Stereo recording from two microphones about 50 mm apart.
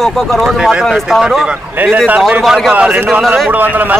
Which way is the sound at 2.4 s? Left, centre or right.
Centre.